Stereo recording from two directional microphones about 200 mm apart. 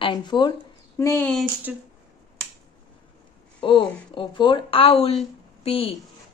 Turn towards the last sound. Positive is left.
turn(degrees=30)  # may be behind; listen again after turning